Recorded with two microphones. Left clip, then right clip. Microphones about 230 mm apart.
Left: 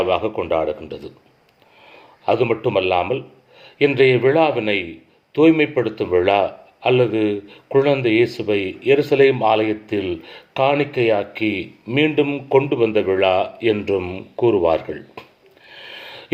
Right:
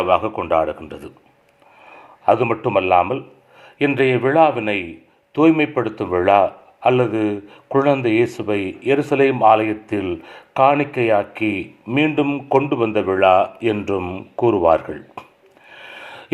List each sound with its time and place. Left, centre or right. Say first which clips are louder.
0.0 s a man's voice: right 2 dB; centre
2.2 s a man's voice: right 1 dB; centre
8.5 s speech: left 1 dB; right
8.9 s a man's voice: left 2 dB; centre
9.6 s speech: left 1 dB; right
10.0 s speech: even; centre
11.3 s speech: even; right
11.9 s a man's voice: left 1 dB; centre
14.7 s speech: right 3 dB; right
14.9 s speech: right 1 dB; centre
15.7 s a sound: even; centre